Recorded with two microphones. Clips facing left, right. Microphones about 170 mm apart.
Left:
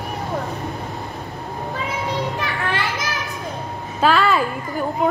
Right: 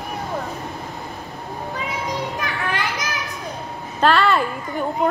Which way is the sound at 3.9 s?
5° left (ahead or behind).